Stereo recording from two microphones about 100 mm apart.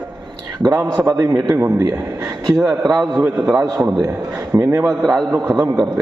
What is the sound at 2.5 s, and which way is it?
Speech, 5° right (ahead or behind).